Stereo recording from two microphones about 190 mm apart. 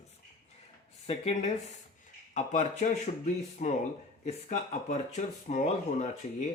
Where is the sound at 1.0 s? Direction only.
35° left (ahead or behind).